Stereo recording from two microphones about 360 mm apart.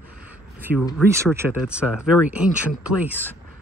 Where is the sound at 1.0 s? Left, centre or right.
Centre.